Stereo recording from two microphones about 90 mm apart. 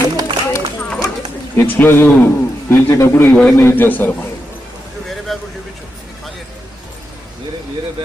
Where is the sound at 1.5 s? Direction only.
25° left (ahead or behind).